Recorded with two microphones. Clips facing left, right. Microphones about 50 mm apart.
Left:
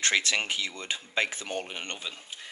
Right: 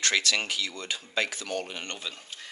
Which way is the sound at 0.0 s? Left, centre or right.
Left.